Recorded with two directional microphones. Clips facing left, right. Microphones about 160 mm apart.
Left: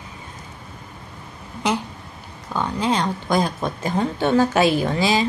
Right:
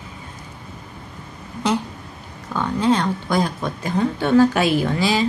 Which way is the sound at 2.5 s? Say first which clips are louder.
Right 3 dB; 15° left (ahead or behind).